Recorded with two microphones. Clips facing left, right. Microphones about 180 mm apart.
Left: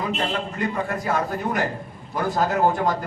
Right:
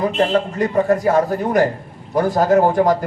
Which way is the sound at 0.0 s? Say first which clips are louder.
Right 9 dB; 40° right (ahead or behind).